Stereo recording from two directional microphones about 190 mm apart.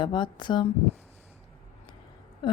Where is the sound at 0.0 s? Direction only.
25° left (ahead or behind).